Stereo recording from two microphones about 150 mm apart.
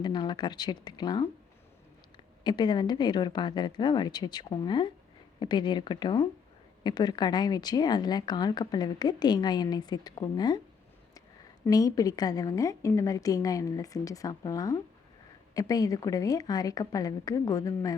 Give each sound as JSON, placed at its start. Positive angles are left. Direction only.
{"t": 0.0, "sound": "speech", "side_deg": 30}
{"t": 2.4, "sound": "speech", "side_deg": 30}
{"t": 11.7, "sound": "speech", "side_deg": 25}